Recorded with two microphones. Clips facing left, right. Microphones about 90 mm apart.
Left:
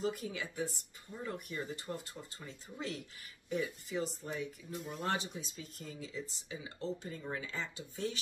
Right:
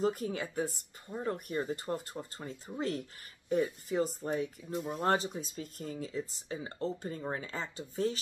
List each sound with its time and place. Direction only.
0.0 s speech: 40° right (ahead or behind)